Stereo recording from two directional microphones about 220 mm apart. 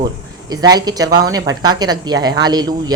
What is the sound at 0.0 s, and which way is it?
Speech, 20° right (ahead or behind).